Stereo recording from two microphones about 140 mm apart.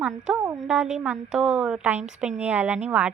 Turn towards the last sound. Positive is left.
turn(degrees=-10)  # may be behind; listen again after turning